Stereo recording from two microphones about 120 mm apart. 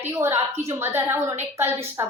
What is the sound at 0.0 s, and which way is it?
A woman's voice, 20° right (ahead or behind).